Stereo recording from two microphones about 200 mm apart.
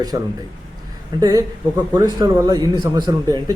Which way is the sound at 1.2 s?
20° right (ahead or behind).